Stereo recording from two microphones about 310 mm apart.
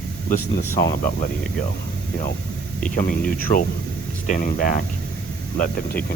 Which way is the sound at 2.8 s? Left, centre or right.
Left.